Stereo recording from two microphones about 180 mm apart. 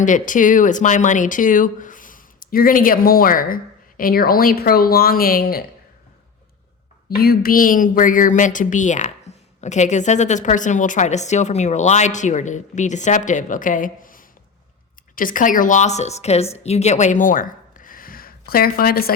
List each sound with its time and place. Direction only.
0.0 s a woman's voice: 45° left (ahead or behind)
7.1 s a woman's voice: 55° left (ahead or behind)